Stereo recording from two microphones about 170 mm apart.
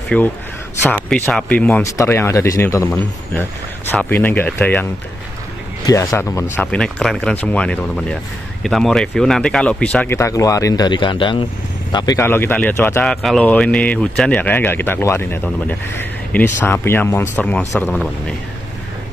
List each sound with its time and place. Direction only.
0.1 s speech: 10° left (ahead or behind)
5.9 s speech: 20° left (ahead or behind)
13.0 s speech: centre (ahead or behind)
17.8 s speech: centre (ahead or behind)